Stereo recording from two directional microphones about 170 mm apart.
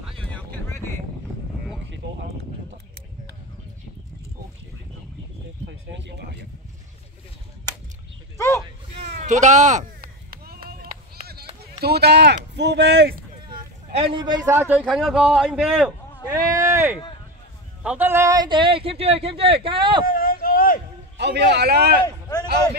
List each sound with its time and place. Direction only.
0.2 s vehicle: 10° left (ahead or behind)
5.7 s a sound: 90° right
8.4 s a sound: 15° left (ahead or behind)
9.2 s chop: 45° right (ahead or behind); by 11.4 s 65° right (ahead or behind)
11.8 s a man's voice: 70° right (ahead or behind)
12.5 s speech: 90° right
13.8 s a man's voice: 35° right (ahead or behind); by 14.8 s 15° right (ahead or behind)
14.8 s a man's voice: 5° left (ahead or behind)
16.3 s a sound: 20° right (ahead or behind)
17.8 s speech: 10° right (ahead or behind); by 20.1 s 30° right (ahead or behind)
20.1 s a sound: 60° left (ahead or behind)
21.2 s a man's voice: 80° right